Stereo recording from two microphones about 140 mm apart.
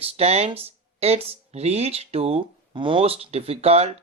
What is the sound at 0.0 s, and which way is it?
Speech, 45° right (ahead or behind).